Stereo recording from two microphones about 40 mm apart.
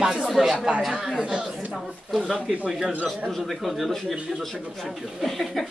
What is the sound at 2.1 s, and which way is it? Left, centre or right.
A man's voice, centre.